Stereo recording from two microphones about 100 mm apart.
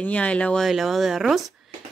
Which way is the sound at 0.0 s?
15° left (ahead or behind).